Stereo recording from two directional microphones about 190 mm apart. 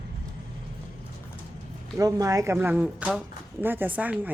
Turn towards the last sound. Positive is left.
turn(degrees=-10)  # may be behind; listen again after turning